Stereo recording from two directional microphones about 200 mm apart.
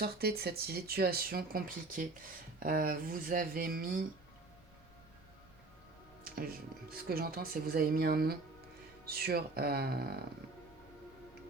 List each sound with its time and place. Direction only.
0.0 s speech: 50° right (ahead or behind)
6.2 s music: 45° right (ahead or behind)
7.1 s speech: 50° right (ahead or behind)